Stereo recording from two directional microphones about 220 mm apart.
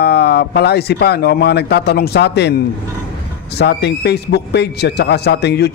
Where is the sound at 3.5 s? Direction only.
50° left (ahead or behind).